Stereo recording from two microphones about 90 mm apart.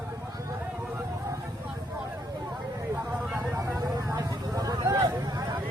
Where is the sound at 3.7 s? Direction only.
40° right (ahead or behind).